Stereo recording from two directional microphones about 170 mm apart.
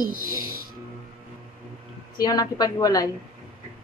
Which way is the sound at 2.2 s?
20° left (ahead or behind).